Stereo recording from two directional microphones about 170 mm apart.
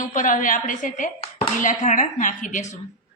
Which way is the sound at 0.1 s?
50° left (ahead or behind).